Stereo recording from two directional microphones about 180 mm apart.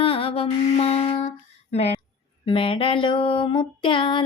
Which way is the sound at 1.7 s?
35° left (ahead or behind).